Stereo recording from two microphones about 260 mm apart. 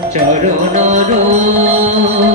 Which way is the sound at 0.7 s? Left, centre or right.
Right.